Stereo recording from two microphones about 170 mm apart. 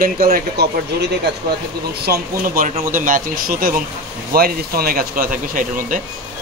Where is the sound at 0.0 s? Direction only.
60° right (ahead or behind).